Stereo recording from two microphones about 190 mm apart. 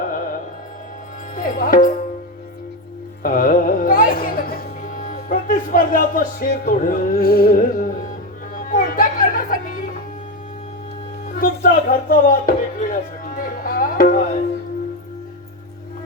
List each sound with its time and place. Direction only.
0.0 s music: 45° left (ahead or behind)
1.4 s music: 45° left (ahead or behind)
3.2 s music: 45° left (ahead or behind)
11.3 s speech: 45° left (ahead or behind)